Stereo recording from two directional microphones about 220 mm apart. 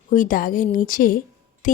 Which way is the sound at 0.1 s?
35° left (ahead or behind).